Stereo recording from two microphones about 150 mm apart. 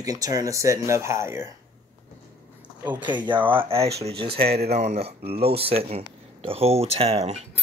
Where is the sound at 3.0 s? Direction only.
30° right (ahead or behind).